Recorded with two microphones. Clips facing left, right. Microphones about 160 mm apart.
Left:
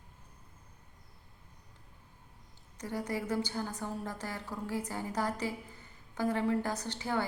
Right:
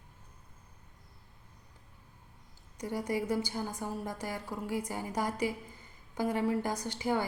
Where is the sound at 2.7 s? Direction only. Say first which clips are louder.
Right 3 dB; 10° right (ahead or behind).